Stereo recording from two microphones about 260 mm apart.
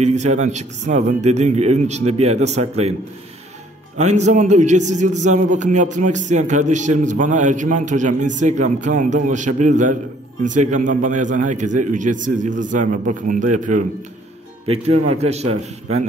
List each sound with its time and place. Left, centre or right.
0.0 s a man's voice: right
4.0 s a man's voice: right